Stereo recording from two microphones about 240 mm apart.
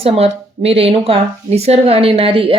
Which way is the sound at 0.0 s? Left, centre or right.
Right.